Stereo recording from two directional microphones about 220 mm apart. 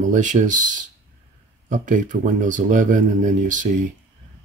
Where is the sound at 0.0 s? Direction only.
35° right (ahead or behind).